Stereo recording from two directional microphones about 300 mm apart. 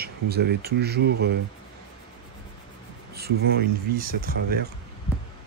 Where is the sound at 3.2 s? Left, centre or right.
Right.